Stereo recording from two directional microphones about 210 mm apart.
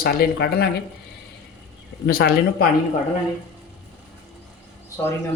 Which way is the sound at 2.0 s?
45° left (ahead or behind).